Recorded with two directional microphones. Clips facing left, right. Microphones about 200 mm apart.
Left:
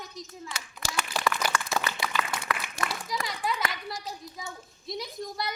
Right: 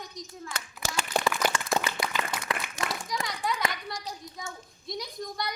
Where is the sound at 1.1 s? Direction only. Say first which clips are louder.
Right 2 dB; 55° right (ahead or behind).